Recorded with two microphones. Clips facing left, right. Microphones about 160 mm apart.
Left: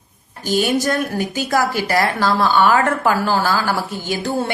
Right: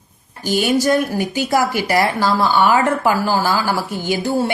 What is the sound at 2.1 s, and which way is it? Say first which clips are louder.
A woman's voice: even; 15° right (ahead or behind).